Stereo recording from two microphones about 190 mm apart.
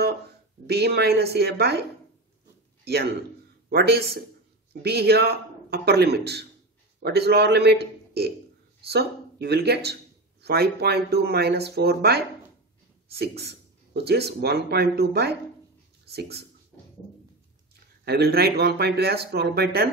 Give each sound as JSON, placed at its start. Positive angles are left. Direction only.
{"t": 0.7, "sound": "a man's voice", "side_deg": -60}
{"t": 13.2, "sound": "speech", "side_deg": -60}
{"t": 18.0, "sound": "speech", "side_deg": -55}